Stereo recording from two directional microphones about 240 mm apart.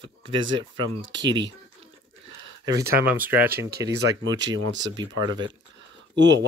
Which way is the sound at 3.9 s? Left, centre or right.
Right.